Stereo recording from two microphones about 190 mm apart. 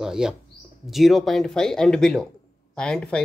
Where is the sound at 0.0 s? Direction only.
5° right (ahead or behind).